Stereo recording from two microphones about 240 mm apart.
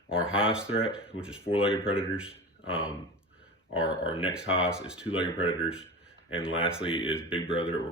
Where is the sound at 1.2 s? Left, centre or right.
Centre.